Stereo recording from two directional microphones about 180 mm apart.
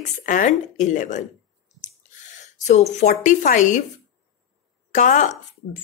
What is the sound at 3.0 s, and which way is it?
Speech, 45° left (ahead or behind).